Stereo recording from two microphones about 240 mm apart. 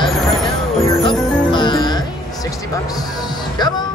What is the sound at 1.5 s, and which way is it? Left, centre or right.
Music, centre.